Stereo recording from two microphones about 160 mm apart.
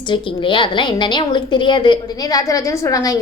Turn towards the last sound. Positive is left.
turn(degrees=20)  # may be behind; listen again after turning